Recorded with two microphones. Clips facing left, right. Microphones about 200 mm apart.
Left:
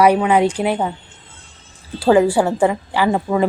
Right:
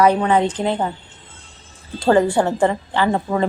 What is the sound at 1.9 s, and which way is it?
Speech, 5° left (ahead or behind).